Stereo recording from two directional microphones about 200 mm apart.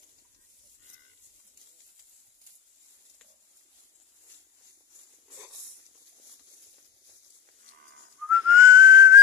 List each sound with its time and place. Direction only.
8.3 s whistling: 15° right (ahead or behind)